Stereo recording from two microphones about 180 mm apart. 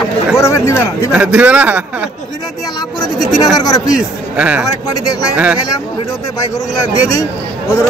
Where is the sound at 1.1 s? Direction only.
5° right (ahead or behind).